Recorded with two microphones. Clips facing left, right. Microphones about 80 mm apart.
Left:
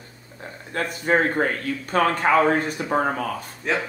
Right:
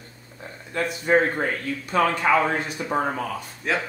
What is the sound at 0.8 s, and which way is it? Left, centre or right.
Speech, left.